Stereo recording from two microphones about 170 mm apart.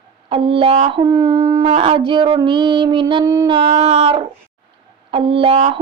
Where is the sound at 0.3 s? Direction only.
35° right (ahead or behind).